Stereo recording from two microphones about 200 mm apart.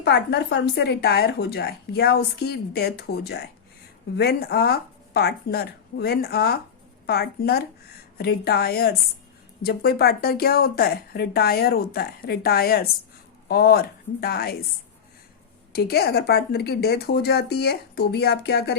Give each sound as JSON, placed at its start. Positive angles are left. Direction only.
{"t": 0.0, "sound": "speech", "side_deg": 55}
{"t": 15.7, "sound": "speech", "side_deg": 50}